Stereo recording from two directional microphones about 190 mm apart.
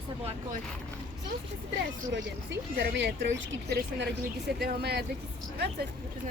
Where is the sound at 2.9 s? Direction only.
70° right (ahead or behind).